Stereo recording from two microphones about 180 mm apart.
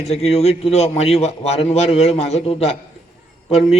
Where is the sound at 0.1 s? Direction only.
35° left (ahead or behind).